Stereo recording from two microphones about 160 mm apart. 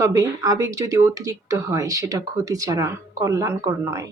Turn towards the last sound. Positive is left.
turn(degrees=-20)  # may be behind; listen again after turning